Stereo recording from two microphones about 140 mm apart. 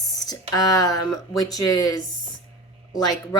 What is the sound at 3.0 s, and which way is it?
Speech, 30° left (ahead or behind).